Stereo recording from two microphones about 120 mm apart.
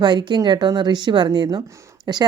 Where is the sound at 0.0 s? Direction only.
40° right (ahead or behind).